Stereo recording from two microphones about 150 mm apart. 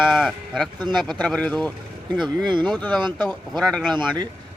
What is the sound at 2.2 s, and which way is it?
Speech, 30° right (ahead or behind).